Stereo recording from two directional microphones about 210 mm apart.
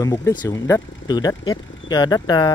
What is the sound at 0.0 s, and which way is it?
Speech, 15° left (ahead or behind).